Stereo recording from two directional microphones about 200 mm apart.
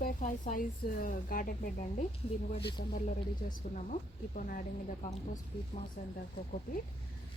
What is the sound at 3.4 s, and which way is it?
Speech, 50° left (ahead or behind).